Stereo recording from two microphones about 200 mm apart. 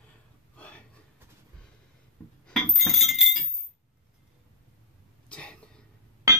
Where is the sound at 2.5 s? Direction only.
Centre (ahead or behind).